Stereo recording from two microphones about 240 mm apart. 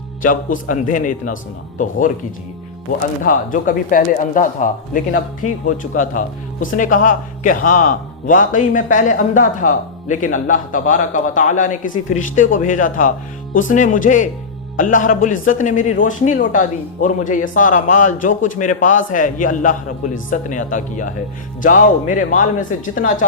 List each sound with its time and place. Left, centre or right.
0.2 s speech: left
3.2 s speech: left